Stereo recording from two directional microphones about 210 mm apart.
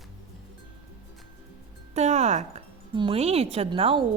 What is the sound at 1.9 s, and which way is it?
A woman's voice, 30° right (ahead or behind).